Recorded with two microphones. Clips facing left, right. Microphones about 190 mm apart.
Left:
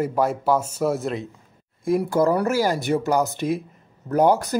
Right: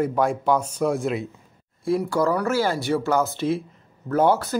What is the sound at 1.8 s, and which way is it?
Speech, 20° left (ahead or behind).